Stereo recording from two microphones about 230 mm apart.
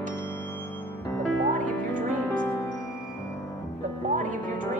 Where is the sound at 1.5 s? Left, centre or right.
Right.